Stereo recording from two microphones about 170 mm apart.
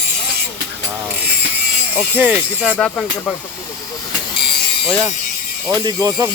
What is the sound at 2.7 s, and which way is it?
Speech, 5° left (ahead or behind).